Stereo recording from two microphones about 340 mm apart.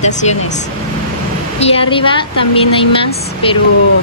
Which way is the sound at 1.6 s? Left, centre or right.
Centre.